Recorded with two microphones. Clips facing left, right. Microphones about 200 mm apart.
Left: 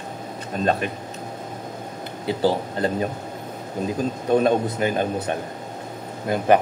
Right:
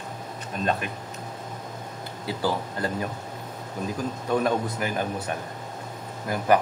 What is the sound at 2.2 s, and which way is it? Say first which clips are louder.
A man's voice: left 6 dB; 25° left (ahead or behind).